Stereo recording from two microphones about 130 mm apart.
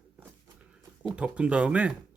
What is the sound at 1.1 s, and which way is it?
Speech, 10° right (ahead or behind).